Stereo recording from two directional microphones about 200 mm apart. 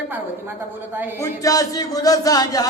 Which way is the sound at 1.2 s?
15° left (ahead or behind).